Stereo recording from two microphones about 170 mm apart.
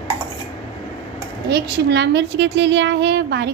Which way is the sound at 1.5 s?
80° right.